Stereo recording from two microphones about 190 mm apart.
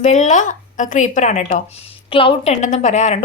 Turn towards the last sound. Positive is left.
turn(degrees=35)  # may be behind; listen again after turning